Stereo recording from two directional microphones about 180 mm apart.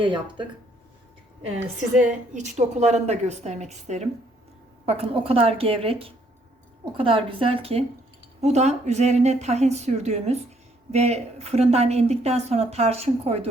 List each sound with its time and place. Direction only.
0.0 s a woman's voice: 25° right (ahead or behind)
2.0 s a woman's voice: 45° right (ahead or behind)